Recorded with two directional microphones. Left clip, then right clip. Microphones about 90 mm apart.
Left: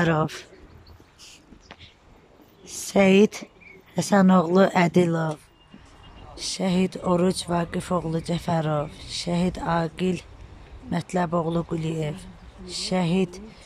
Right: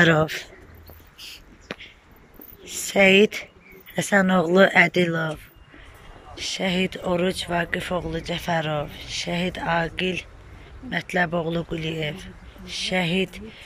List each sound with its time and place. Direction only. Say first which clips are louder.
0.0 s speech: right 5 dB; 20° left (ahead or behind)
1.2 s a sound: right 8 dB; 35° left (ahead or behind)
2.6 s speech: right 3 dB; 30° left (ahead or behind)